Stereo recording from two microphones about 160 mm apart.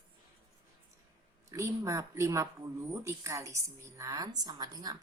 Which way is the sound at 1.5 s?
20° right (ahead or behind).